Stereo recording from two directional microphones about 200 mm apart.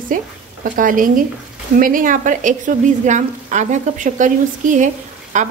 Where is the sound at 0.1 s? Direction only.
40° right (ahead or behind).